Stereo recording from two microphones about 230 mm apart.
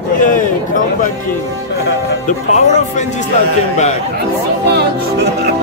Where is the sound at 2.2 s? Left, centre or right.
Left.